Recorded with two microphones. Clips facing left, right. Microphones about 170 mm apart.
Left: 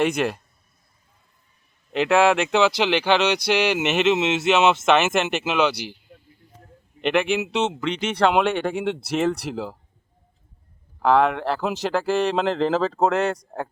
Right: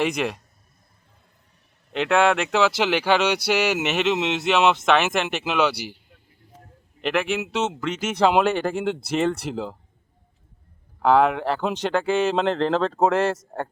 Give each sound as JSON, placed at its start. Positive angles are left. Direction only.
{"t": 0.0, "sound": "speech", "side_deg": 0}
{"t": 1.9, "sound": "speech", "side_deg": 0}
{"t": 7.0, "sound": "speech", "side_deg": 0}
{"t": 11.0, "sound": "speech", "side_deg": 0}